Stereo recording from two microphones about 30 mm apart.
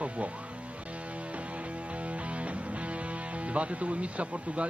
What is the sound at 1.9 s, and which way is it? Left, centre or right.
Speech, right.